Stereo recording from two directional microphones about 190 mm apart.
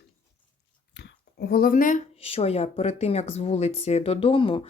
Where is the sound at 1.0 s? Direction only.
60° left (ahead or behind).